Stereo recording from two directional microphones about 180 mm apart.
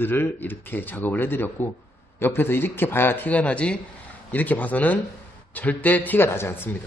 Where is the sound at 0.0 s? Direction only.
10° left (ahead or behind).